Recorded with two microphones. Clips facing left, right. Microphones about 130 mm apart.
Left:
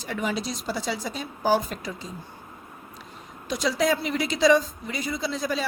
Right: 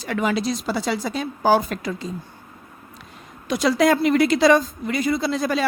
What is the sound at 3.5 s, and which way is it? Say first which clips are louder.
A woman's voice: right 6 dB; 60° right (ahead or behind).